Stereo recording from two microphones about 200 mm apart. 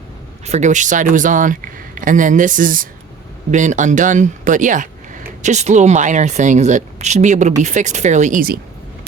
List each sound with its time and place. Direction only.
0.4 s speech: 35° right (ahead or behind)